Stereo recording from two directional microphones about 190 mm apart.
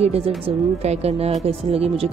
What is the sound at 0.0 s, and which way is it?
Speech, 30° right (ahead or behind).